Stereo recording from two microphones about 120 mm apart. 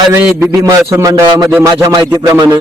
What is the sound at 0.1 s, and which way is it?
Speech, 20° right (ahead or behind).